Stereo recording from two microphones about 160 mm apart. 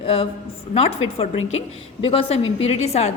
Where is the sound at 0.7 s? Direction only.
40° left (ahead or behind).